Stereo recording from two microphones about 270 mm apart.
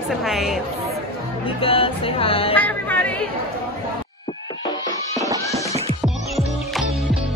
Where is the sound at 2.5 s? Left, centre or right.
Centre.